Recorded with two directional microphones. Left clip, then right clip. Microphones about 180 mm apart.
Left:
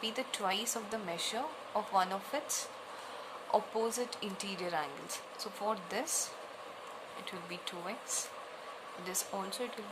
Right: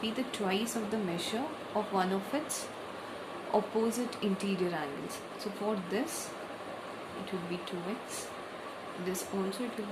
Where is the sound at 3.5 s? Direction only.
30° left (ahead or behind).